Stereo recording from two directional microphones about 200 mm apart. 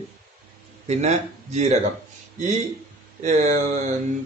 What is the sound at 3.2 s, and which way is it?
Speech, 40° right (ahead or behind).